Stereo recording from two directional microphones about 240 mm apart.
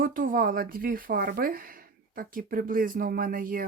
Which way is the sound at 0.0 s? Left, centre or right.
Right.